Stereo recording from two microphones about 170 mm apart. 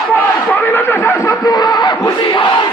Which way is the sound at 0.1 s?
10° left (ahead or behind).